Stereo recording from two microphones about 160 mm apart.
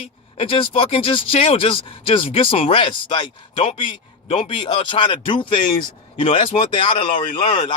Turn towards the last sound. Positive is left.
turn(degrees=30)  # may be behind; listen again after turning